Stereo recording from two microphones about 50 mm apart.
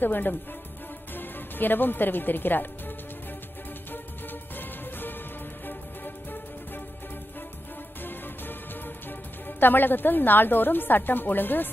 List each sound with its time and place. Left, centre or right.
0.0 s a woman's voice: left
3.9 s music: left
8.0 s music: left
9.5 s a woman's voice: left